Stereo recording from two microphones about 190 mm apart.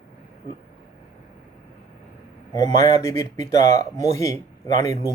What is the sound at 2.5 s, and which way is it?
Speech, 20° left (ahead or behind).